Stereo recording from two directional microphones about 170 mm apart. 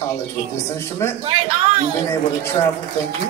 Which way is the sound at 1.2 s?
35° right (ahead or behind).